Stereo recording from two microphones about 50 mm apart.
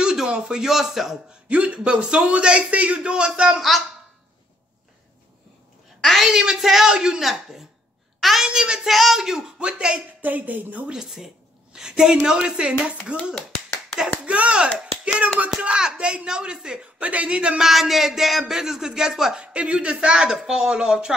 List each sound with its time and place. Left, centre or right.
0.0 s a man's voice: centre
1.5 s a man's voice: right; by 3.6 s centre
6.2 s a woman's voice: centre
8.5 s a man's voice: centre
8.8 s speech: centre
10.2 s a woman's voice: right
10.9 s speech: centre
13.3 s clapping: centre
14.2 s hands: right
15.1 s a man's voice: right
17.0 s a man's voice: right
17.6 s a sound: centre
18.5 s speech: centre
19.4 s speech: right